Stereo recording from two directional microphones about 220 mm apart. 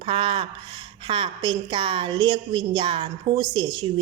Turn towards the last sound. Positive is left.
turn(degrees=-20)  # may be behind; listen again after turning